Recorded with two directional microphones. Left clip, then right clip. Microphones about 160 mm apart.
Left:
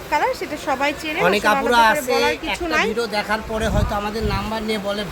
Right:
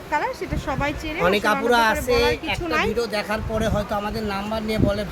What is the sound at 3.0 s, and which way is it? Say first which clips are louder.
Speech: left 3 dB; 15° right (ahead or behind).